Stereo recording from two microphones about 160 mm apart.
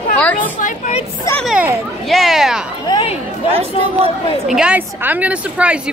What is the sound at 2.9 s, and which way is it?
Speech, 35° left (ahead or behind).